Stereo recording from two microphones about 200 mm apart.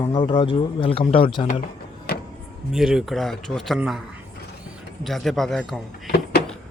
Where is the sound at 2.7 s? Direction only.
5° right (ahead or behind).